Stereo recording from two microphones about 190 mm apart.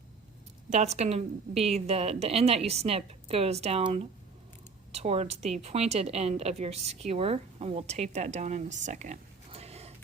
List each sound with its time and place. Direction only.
0.7 s a woman's voice: 35° right (ahead or behind)